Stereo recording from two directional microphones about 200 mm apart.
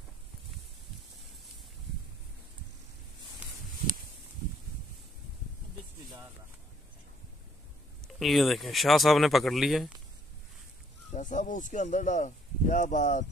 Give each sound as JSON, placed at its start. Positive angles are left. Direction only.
{"t": 8.2, "sound": "speech", "side_deg": 0}
{"t": 11.1, "sound": "speech", "side_deg": 40}